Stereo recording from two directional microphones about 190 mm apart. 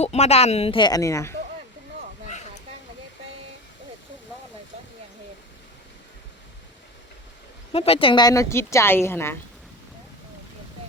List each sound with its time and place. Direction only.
0.0 s speech: 35° left (ahead or behind); by 1.4 s 15° left (ahead or behind)
7.7 s a woman's voice: 30° left (ahead or behind); by 9.4 s 10° left (ahead or behind)